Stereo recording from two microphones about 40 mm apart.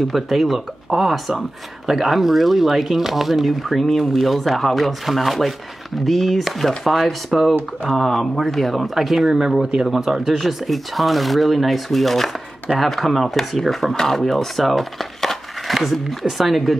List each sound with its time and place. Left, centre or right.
0.1 s speech: centre